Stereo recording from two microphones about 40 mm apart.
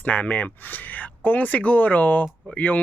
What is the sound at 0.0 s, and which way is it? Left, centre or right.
Speech, left.